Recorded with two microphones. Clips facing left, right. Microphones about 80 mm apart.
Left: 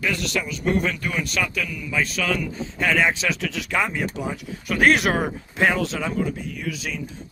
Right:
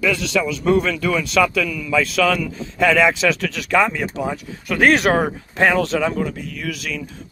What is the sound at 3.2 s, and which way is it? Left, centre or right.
Speech, right.